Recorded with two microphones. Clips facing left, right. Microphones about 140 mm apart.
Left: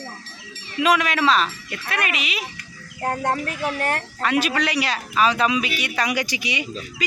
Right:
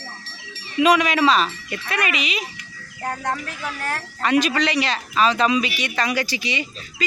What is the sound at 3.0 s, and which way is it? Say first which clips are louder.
Speech: left 3 dB; 25° left (ahead or behind).